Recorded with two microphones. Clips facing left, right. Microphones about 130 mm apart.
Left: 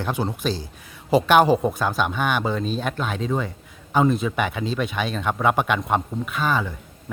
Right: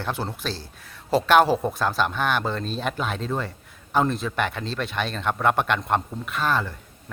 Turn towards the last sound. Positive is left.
turn(degrees=5)  # may be behind; listen again after turning